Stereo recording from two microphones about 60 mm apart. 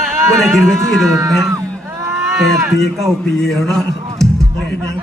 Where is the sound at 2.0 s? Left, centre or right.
Right.